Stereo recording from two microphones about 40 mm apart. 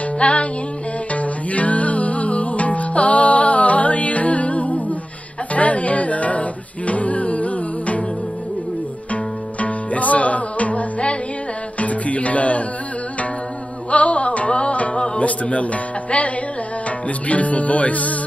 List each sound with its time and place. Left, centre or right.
0.2 s music: left
9.1 s music: left
13.8 s music: left
15.0 s music: left
15.2 s music: left